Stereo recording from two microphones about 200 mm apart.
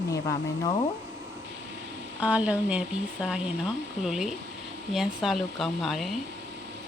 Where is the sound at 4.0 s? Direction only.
5° right (ahead or behind).